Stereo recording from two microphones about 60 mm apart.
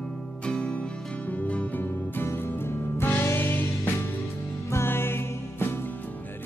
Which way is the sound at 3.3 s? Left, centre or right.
Left.